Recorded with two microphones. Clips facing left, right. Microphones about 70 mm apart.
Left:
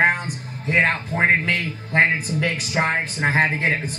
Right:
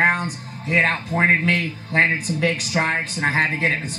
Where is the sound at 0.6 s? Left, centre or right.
Left.